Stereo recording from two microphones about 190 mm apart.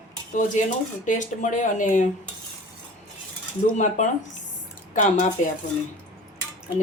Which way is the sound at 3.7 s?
40° left (ahead or behind).